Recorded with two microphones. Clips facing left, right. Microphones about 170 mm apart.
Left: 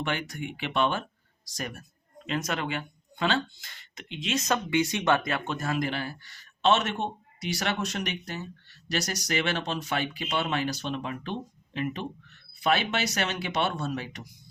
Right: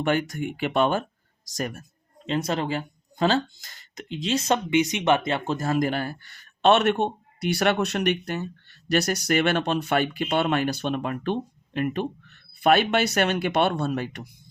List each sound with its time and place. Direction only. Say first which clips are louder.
0.0 s speech: right 7 dB; 45° right (ahead or behind)
2.2 s speech: right 5 dB; 30° right (ahead or behind); by 14.3 s 55° right (ahead or behind)